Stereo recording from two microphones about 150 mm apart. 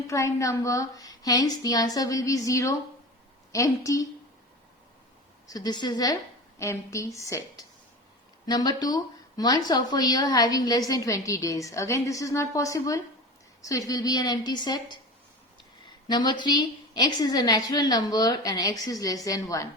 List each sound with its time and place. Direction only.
0.1 s a woman's voice: 20° left (ahead or behind)
5.5 s a woman's voice: 25° left (ahead or behind)
16.0 s a woman's voice: 30° left (ahead or behind)